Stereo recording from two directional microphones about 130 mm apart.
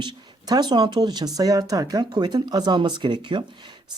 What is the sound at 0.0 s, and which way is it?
Speech, 30° right (ahead or behind).